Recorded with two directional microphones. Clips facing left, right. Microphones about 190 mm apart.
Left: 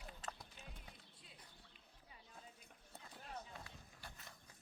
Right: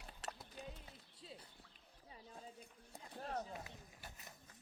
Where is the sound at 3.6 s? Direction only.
20° right (ahead or behind).